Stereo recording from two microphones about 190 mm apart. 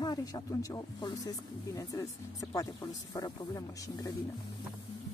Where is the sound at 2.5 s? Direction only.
20° left (ahead or behind).